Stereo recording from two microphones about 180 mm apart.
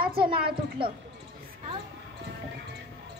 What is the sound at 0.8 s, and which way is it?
Speech, 30° right (ahead or behind).